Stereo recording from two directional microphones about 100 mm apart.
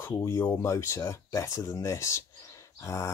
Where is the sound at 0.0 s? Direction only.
25° left (ahead or behind).